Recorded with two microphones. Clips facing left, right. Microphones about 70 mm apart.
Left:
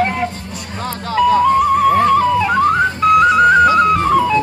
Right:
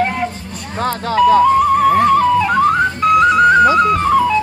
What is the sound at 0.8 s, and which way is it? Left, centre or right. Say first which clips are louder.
Music: right 6 dB; right.